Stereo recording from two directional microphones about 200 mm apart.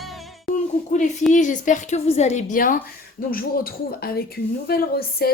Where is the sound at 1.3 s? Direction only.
40° left (ahead or behind).